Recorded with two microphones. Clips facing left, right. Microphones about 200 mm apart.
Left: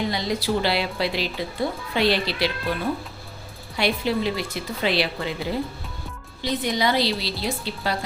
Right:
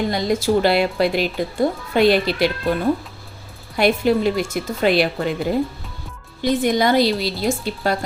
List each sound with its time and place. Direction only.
0.1 s speech: 50° right (ahead or behind)
3.8 s speech: 50° right (ahead or behind)